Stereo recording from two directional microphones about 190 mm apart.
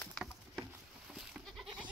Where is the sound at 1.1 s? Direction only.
Centre (ahead or behind).